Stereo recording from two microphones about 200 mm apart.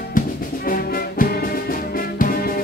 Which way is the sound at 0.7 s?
45° left (ahead or behind).